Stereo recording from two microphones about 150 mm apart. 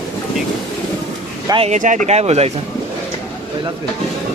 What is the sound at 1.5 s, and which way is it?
Speech, 45° right (ahead or behind).